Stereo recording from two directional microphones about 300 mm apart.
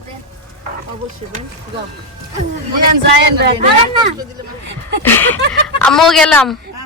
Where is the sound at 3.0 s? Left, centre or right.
Right.